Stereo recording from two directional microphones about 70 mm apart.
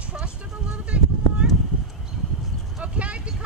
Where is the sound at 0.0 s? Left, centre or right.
Centre.